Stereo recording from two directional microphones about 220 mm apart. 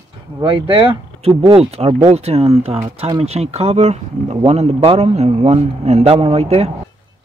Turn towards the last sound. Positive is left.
turn(degrees=-30)  # may be behind; listen again after turning